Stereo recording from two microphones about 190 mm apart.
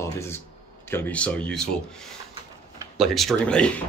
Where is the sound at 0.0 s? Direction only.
15° left (ahead or behind).